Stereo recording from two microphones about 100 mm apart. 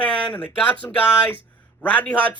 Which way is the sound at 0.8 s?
25° left (ahead or behind).